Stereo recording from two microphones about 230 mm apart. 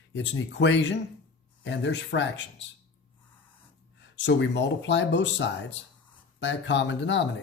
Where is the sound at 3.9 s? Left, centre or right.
Left.